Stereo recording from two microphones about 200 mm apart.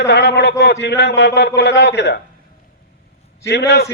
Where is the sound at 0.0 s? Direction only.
60° left (ahead or behind).